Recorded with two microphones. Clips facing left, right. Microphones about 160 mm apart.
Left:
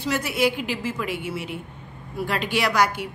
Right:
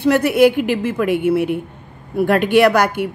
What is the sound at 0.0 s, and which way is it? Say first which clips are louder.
Speech: right 11 dB; 60° right (ahead or behind).